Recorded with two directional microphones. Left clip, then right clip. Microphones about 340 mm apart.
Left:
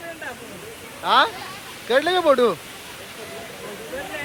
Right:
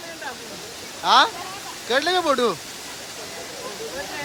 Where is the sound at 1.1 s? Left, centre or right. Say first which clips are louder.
Right 1 dB; centre.